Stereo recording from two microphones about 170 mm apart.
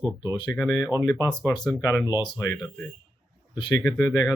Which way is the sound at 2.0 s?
10° right (ahead or behind).